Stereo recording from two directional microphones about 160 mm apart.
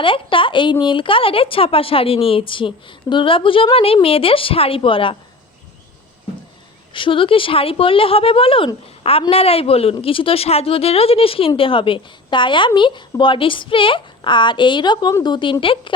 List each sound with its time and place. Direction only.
0.0 s speech: 30° left (ahead or behind)
6.9 s speech: 30° left (ahead or behind)